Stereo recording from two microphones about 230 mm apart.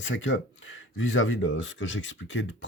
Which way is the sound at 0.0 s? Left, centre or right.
Left.